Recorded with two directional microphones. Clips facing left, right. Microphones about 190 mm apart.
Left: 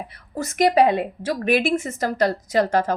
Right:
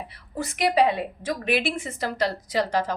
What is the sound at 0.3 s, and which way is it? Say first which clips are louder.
Speech: left 4 dB; 45° left (ahead or behind).